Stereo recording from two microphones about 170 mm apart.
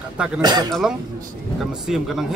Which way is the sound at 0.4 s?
25° right (ahead or behind).